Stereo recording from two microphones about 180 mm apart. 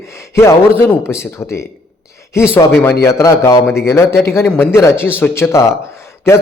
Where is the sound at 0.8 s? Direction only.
10° left (ahead or behind).